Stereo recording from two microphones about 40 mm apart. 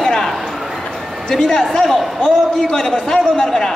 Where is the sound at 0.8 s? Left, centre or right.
Centre.